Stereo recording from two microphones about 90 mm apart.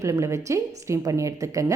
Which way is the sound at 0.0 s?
35° right (ahead or behind).